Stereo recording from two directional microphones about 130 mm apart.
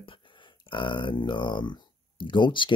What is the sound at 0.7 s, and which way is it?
Speech, 40° left (ahead or behind).